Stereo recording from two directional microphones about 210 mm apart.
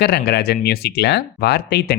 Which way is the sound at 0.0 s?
50° left (ahead or behind).